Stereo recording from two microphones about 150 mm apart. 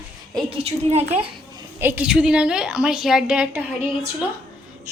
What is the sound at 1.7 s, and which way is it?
A woman's voice, 15° right (ahead or behind).